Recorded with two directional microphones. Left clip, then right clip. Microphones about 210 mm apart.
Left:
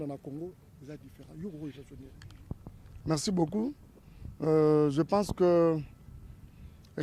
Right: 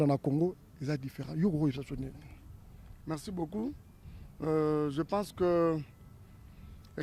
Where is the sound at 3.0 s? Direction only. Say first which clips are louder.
Left 8 dB; 75° left (ahead or behind).